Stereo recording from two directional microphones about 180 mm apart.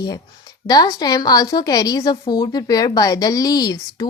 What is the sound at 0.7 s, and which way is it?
A woman's voice, 20° left (ahead or behind).